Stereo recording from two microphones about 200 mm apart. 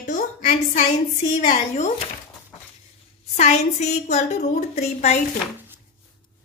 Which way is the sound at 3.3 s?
35° left (ahead or behind).